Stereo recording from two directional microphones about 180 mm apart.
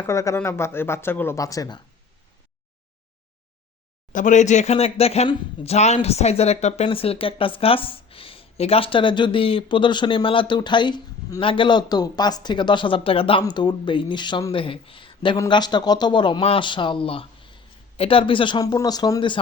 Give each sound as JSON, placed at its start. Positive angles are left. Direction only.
{"t": 0.0, "sound": "speech", "side_deg": 15}
{"t": 4.1, "sound": "speech", "side_deg": 45}